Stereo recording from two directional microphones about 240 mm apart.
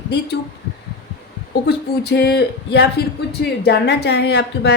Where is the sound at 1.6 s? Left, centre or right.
Left.